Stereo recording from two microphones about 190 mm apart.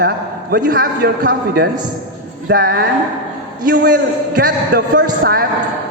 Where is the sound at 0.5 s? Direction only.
55° right (ahead or behind).